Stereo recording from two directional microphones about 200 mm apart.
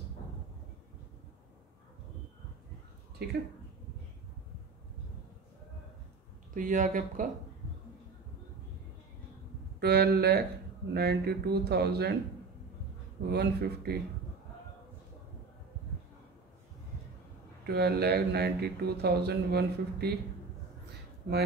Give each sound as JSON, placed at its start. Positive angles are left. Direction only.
{"t": 6.5, "sound": "speech", "side_deg": -40}
{"t": 9.8, "sound": "speech", "side_deg": -55}
{"t": 13.3, "sound": "speech", "side_deg": -55}
{"t": 17.6, "sound": "speech", "side_deg": -55}